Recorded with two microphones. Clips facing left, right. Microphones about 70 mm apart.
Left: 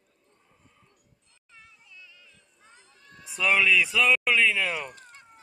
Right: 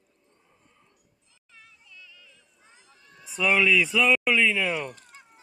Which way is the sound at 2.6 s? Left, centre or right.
Left.